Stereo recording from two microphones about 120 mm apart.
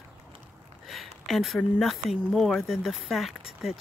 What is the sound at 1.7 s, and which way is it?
Speech, centre (ahead or behind).